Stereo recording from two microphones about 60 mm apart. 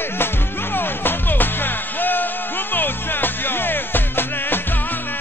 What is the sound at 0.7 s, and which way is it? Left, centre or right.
Music, left.